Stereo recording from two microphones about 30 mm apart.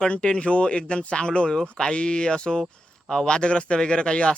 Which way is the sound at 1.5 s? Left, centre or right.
Left.